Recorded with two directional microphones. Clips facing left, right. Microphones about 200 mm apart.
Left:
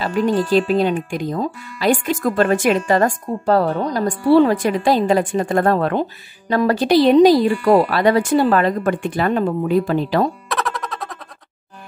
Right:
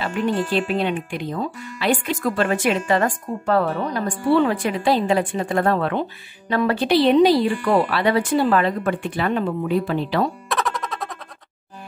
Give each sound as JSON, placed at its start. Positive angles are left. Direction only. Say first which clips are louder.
{"t": 0.0, "sound": "speech", "louder": "left 4 dB", "side_deg": 40}
{"t": 10.5, "sound": "music", "louder": "left 1 dB", "side_deg": 0}